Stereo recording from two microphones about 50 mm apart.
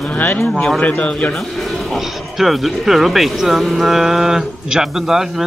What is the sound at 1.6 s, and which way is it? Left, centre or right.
Speech, centre.